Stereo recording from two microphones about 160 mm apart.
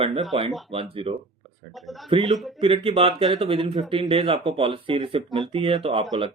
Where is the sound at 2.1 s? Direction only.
35° right (ahead or behind).